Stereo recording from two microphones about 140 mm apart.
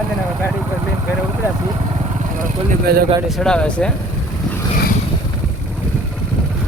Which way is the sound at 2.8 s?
90° right.